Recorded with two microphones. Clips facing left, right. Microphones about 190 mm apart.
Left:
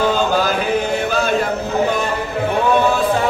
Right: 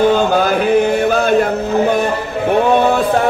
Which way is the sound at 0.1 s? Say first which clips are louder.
Right 4 dB; 60° right (ahead or behind).